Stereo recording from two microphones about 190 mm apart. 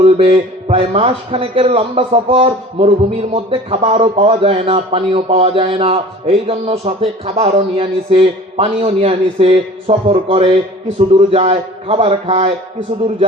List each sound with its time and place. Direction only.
0.0 s a man's voice: 30° right (ahead or behind)